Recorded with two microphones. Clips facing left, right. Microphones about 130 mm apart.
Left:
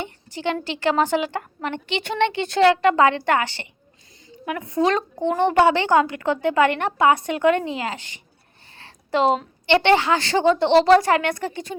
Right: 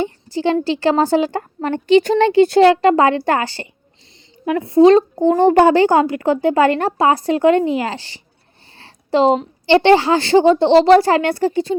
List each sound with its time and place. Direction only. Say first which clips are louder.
0.0 s a woman's voice: right 8 dB; 30° right (ahead or behind)